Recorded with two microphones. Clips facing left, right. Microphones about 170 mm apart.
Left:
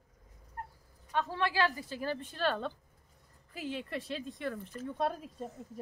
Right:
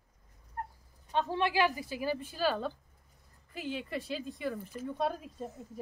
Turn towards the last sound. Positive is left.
turn(degrees=0)  # may be behind; listen again after turning